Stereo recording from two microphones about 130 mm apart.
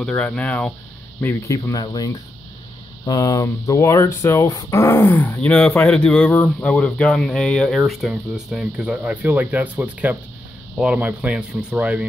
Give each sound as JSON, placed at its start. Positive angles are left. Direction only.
{"t": 0.0, "sound": "speech", "side_deg": 10}
{"t": 1.2, "sound": "speech", "side_deg": 25}
{"t": 3.1, "sound": "speech", "side_deg": 30}
{"t": 5.4, "sound": "speech", "side_deg": 10}